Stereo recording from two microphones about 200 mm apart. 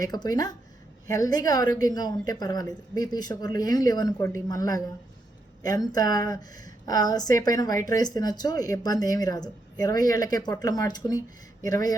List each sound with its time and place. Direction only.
0.0 s a woman's voice: 20° left (ahead or behind)